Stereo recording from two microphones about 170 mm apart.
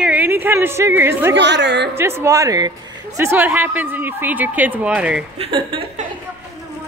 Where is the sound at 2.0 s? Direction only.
15° right (ahead or behind).